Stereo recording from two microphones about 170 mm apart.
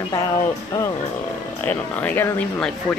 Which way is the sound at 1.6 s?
10° left (ahead or behind).